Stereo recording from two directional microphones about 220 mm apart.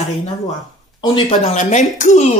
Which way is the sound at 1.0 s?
25° left (ahead or behind).